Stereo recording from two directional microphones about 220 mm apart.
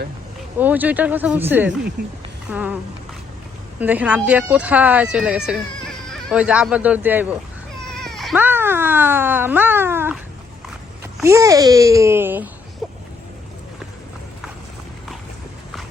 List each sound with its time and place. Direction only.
0.6 s speech: 10° right (ahead or behind)
2.0 s speech: 50° right (ahead or behind)
2.5 s speech: 5° right (ahead or behind)
3.8 s speech: 5° right (ahead or behind)
7.9 s cat: centre (ahead or behind)
11.0 s speech: 10° right (ahead or behind)
12.8 s a sound: centre (ahead or behind)